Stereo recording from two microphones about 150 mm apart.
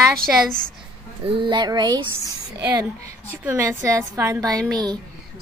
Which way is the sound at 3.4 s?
15° right (ahead or behind).